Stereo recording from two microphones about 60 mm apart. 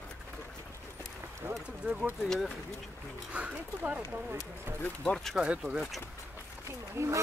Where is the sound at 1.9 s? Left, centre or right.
Right.